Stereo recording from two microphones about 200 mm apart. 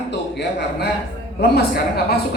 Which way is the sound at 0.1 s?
60° left (ahead or behind).